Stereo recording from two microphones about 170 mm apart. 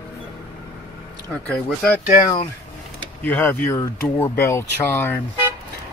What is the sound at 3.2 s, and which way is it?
Speech, 10° left (ahead or behind).